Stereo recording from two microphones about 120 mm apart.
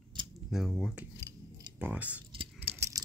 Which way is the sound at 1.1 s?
25° right (ahead or behind).